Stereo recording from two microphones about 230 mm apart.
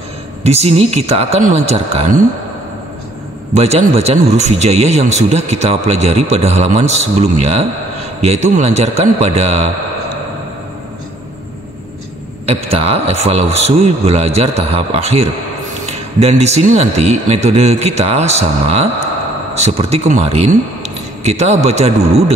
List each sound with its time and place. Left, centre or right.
0.4 s speech: right
3.5 s speech: right
12.6 s a man's voice: right